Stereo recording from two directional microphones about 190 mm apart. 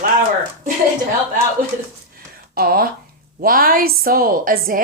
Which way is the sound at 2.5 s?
50° right (ahead or behind).